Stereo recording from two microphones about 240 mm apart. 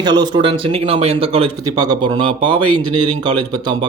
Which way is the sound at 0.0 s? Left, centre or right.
Centre.